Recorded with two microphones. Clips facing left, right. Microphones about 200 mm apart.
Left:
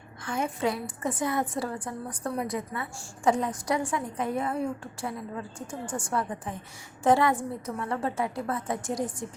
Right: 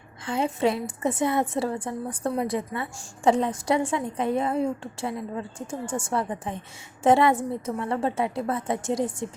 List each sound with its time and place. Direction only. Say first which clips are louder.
0.3 s a woman's voice: right 4 dB; 25° right (ahead or behind)